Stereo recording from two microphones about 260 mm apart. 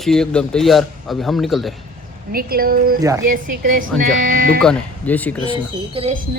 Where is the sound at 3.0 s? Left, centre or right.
Centre.